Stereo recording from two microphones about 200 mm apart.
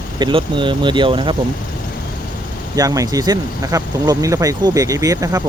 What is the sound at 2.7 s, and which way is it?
Speech, 15° right (ahead or behind).